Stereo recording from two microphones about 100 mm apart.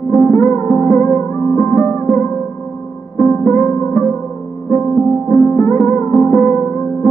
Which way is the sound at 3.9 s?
20° left (ahead or behind).